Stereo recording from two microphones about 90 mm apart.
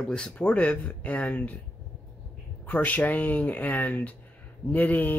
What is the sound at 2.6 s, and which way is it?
Speech, 15° left (ahead or behind).